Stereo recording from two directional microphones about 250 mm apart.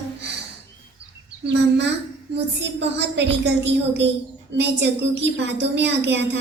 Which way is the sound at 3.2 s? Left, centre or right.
Right.